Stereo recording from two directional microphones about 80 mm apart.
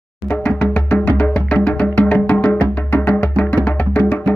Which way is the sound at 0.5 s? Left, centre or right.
Left.